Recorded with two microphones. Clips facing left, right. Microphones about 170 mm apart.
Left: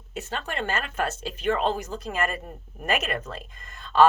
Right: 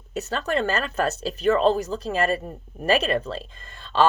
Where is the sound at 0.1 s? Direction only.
40° right (ahead or behind).